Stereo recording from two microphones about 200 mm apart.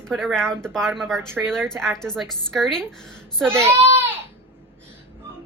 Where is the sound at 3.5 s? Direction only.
10° right (ahead or behind).